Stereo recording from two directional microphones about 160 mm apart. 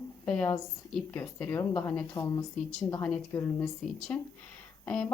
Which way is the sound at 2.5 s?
5° left (ahead or behind).